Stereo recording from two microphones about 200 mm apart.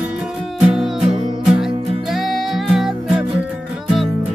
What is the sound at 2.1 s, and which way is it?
Music, centre (ahead or behind).